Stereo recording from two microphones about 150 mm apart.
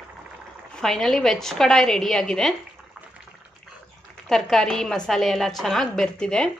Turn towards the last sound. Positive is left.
turn(degrees=5)  # may be behind; listen again after turning